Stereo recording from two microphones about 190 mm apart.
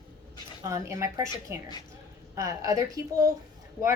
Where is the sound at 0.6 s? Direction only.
15° right (ahead or behind).